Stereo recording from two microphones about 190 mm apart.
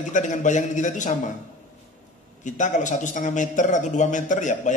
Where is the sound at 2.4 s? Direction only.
40° left (ahead or behind).